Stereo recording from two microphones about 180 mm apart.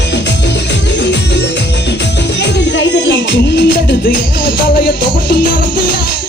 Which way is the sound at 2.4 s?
75° left (ahead or behind).